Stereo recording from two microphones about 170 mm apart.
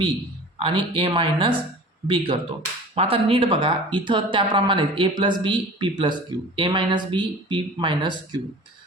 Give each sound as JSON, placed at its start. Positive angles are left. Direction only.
{"t": 0.6, "sound": "speech", "side_deg": -30}